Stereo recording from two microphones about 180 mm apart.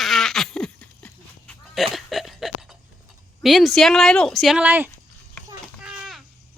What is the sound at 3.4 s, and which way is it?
Speech, centre (ahead or behind).